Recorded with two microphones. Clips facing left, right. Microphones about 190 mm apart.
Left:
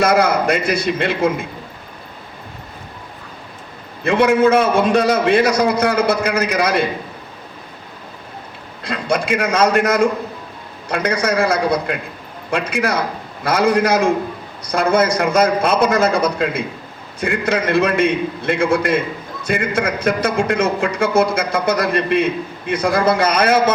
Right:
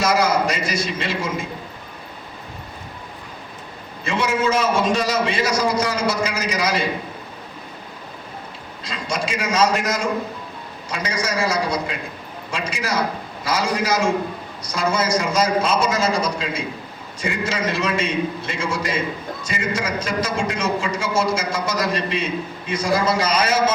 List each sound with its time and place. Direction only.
0.0 s a man's voice: 60° left (ahead or behind)
4.0 s a man's voice: 60° left (ahead or behind)
8.8 s a man's voice: 60° left (ahead or behind)